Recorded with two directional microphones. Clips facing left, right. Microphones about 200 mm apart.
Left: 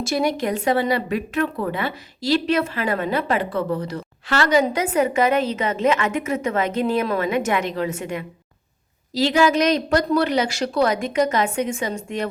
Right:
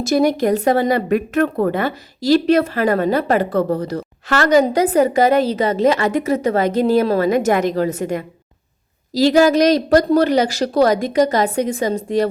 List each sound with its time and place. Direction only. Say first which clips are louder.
0.0 s speech: right 6 dB; 40° right (ahead or behind)